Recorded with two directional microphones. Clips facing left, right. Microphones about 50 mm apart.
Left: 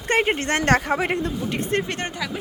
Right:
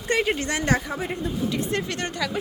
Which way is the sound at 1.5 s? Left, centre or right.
Left.